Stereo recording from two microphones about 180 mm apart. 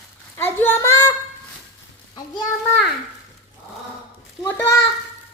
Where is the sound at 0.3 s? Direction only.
10° left (ahead or behind).